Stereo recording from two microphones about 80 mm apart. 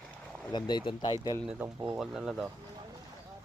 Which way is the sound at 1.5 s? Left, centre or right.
Centre.